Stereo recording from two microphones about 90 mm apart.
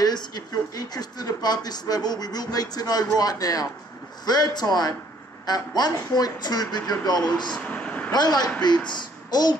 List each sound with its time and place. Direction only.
0.0 s speech: 50° left (ahead or behind)
7.6 s a sound: 15° left (ahead or behind)
8.1 s speech: 50° left (ahead or behind)